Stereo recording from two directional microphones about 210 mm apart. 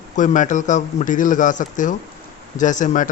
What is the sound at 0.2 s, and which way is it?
A man's voice, 35° left (ahead or behind).